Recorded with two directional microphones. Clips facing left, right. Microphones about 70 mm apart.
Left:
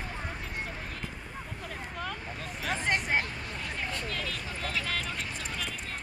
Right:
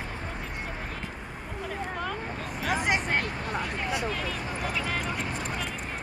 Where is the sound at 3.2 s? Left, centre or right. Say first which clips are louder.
Right 6 dB; right.